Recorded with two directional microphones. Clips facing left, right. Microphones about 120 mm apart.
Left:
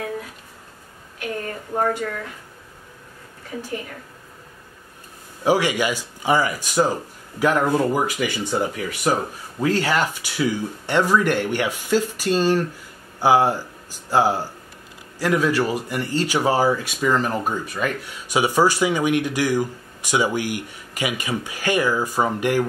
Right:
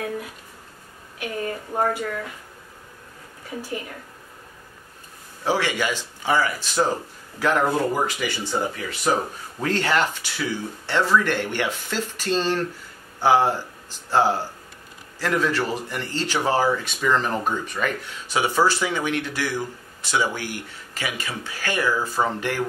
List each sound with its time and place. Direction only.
1.7 s speech: 5° right (ahead or behind)
5.4 s speech: 15° left (ahead or behind)